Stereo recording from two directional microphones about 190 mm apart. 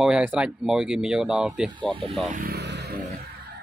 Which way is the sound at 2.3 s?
55° right (ahead or behind).